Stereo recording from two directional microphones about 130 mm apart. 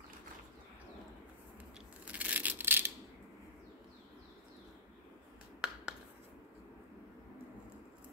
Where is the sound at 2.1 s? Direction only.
10° right (ahead or behind).